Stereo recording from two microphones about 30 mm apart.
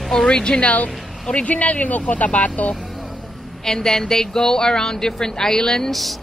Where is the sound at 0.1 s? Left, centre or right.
Left.